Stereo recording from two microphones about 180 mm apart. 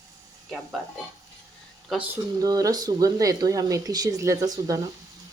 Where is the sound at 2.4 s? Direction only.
20° right (ahead or behind).